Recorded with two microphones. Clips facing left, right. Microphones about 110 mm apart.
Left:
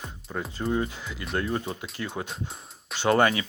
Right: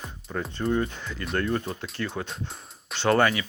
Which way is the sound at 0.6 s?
10° left (ahead or behind).